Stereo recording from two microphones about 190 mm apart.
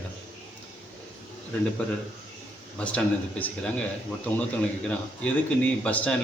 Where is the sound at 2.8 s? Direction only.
5° left (ahead or behind).